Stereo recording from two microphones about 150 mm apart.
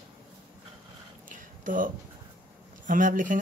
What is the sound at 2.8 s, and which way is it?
Speech, 60° right (ahead or behind).